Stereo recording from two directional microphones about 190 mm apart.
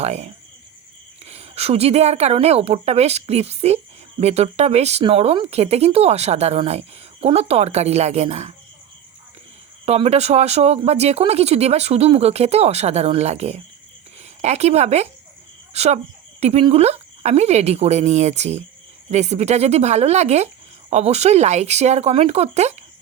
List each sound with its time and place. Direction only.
0.0 s speech: 35° right (ahead or behind)
9.8 s speech: 35° right (ahead or behind)